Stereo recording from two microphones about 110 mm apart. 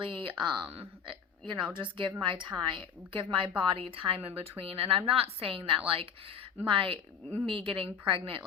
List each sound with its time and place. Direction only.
0.0 s a woman's voice: 50° right (ahead or behind)
0.7 s a woman's voice: 60° right (ahead or behind)
1.7 s a woman's voice: 45° right (ahead or behind)